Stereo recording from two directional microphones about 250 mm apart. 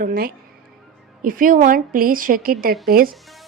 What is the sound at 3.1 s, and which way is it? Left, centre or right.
Speech, centre.